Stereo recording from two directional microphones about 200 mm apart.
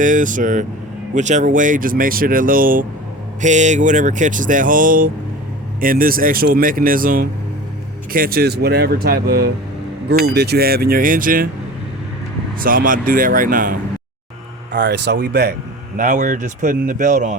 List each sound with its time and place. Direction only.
0.0 s speech: 40° right (ahead or behind)
12.6 s speech: 45° right (ahead or behind)
14.8 s speech: 60° right (ahead or behind); by 17.3 s 40° right (ahead or behind)